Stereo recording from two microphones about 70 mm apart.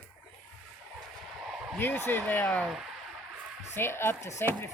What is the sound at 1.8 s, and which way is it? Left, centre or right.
Speech, left.